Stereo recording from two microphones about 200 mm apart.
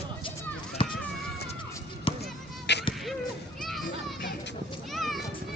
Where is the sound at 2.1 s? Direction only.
25° left (ahead or behind).